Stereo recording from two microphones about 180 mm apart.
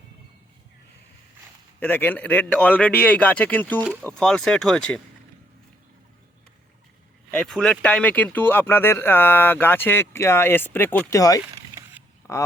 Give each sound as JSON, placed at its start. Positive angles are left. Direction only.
{"t": 1.8, "sound": "speech", "side_deg": 10}
{"t": 7.3, "sound": "speech", "side_deg": 5}